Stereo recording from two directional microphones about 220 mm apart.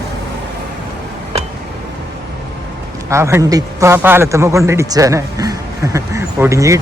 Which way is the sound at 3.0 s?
15° right (ahead or behind).